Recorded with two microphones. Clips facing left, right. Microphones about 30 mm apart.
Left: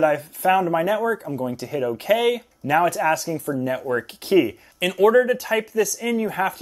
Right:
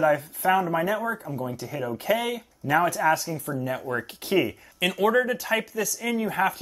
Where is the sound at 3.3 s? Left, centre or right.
Left.